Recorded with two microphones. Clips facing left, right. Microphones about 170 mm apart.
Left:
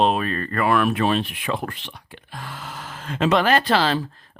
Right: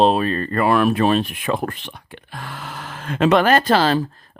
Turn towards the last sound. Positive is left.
turn(degrees=-40)  # may be behind; listen again after turning